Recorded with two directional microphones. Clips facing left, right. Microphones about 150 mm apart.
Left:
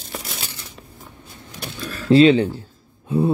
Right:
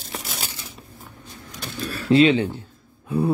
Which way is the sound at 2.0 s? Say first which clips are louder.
Left 4 dB; 35° left (ahead or behind).